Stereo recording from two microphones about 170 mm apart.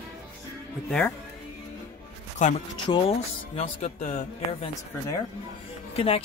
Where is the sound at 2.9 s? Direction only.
35° left (ahead or behind).